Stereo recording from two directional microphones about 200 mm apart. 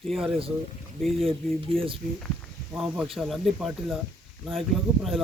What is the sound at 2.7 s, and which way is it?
Speech, 5° right (ahead or behind).